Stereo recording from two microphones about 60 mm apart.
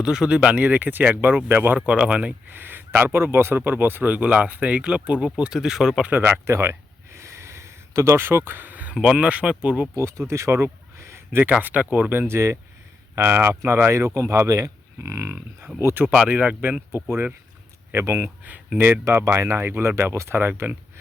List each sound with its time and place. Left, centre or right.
0.0 s speech: centre
2.6 s speech: right; by 6.0 s centre
6.1 s a sound: right
9.1 s speech: right
9.9 s speech: right
12.3 s speech: right
14.0 s speech: right
16.3 s speech: right
16.9 s speech: right